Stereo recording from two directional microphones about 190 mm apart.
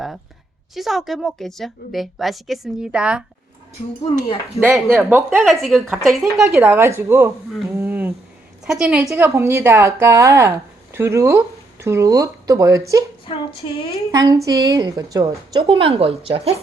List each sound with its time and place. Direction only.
0.7 s a woman's voice: centre (ahead or behind)
4.7 s a woman's voice: centre (ahead or behind)
5.0 s speech: 10° right (ahead or behind)
5.4 s a woman's voice: centre (ahead or behind)
7.7 s a sound: 15° right (ahead or behind)
8.6 s a woman's voice: 5° right (ahead or behind)
9.1 s speech: 15° right (ahead or behind)
13.2 s a woman's voice: 30° left (ahead or behind)
14.1 s speech: 20° right (ahead or behind)
15.6 s speech: 30° right (ahead or behind)